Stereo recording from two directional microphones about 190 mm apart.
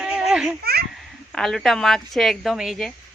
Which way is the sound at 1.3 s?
Centre (ahead or behind).